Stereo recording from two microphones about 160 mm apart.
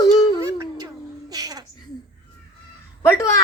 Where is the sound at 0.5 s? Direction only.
25° right (ahead or behind).